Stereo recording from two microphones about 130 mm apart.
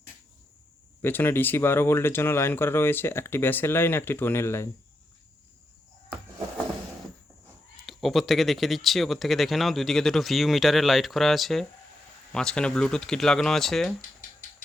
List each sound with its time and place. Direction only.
1.0 s speech: 15° left (ahead or behind)
7.9 s speech: centre (ahead or behind)